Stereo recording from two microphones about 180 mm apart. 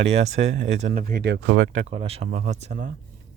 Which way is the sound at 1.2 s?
70° right (ahead or behind).